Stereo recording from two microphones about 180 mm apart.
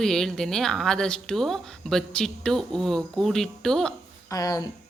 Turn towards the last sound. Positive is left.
turn(degrees=20)  # may be behind; listen again after turning